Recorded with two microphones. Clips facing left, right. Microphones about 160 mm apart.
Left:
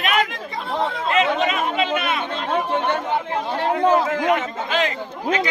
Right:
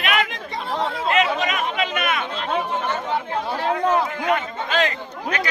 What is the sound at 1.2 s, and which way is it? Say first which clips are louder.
Speech: left 4 dB; 30° left (ahead or behind).